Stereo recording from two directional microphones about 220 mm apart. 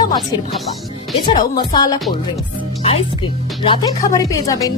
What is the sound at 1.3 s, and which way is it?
Speech, 20° left (ahead or behind).